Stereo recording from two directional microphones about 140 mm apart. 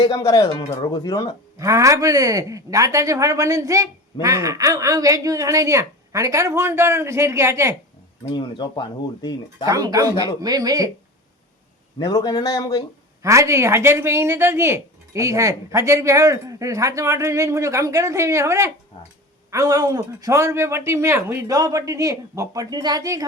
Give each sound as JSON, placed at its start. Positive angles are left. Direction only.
{"t": 0.0, "sound": "speech", "side_deg": 25}
{"t": 1.5, "sound": "speech", "side_deg": -20}
{"t": 8.3, "sound": "speech", "side_deg": 35}
{"t": 9.6, "sound": "speech", "side_deg": -25}
{"t": 11.9, "sound": "speech", "side_deg": 30}
{"t": 13.2, "sound": "speech", "side_deg": -20}